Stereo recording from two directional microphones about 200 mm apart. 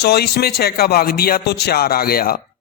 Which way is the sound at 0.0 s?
55° left (ahead or behind).